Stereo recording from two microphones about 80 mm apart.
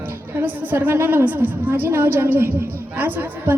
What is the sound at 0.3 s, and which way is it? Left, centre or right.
A woman's voice, right.